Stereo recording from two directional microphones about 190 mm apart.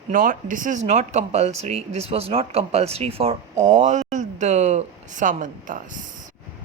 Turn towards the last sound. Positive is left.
turn(degrees=-45)  # may be behind; listen again after turning